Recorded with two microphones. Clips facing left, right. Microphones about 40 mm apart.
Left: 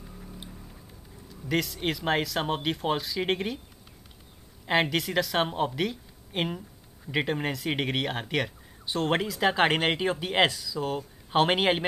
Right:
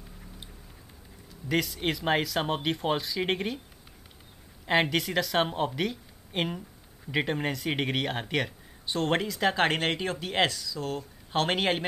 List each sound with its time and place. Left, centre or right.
1.5 s speech: centre
4.6 s speech: centre